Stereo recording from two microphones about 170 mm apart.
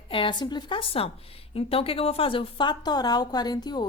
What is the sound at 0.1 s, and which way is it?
A woman's voice, 30° left (ahead or behind).